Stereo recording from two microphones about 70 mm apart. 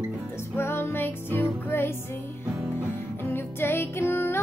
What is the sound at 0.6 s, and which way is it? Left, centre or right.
Music, left.